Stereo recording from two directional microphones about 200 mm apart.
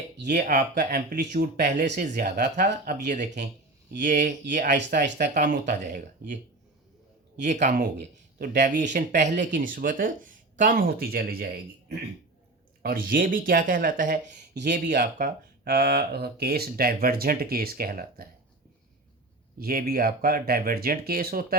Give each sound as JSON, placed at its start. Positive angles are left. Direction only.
{"t": 0.3, "sound": "speech", "side_deg": -40}
{"t": 2.4, "sound": "speech", "side_deg": -55}
{"t": 4.8, "sound": "speech", "side_deg": -60}
{"t": 5.1, "sound": "speech", "side_deg": -40}
{"t": 7.4, "sound": "speech", "side_deg": -35}
{"t": 7.8, "sound": "speech", "side_deg": -55}
{"t": 8.9, "sound": "speech", "side_deg": -45}
{"t": 14.5, "sound": "speech", "side_deg": -55}
{"t": 19.5, "sound": "speech", "side_deg": -50}